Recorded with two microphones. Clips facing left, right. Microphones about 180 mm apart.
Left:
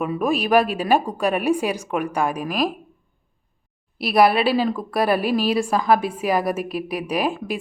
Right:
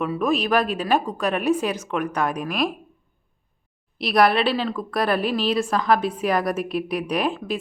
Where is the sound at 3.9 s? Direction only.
5° left (ahead or behind).